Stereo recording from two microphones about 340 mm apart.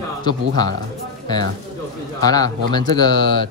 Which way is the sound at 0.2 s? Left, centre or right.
Centre.